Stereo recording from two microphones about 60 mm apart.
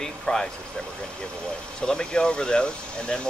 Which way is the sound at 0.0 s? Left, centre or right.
Centre.